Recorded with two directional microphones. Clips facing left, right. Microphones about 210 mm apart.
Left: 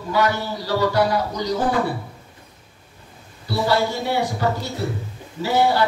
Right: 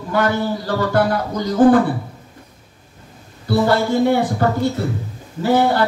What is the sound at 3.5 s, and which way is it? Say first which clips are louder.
Speech: right 4 dB; 50° right (ahead or behind).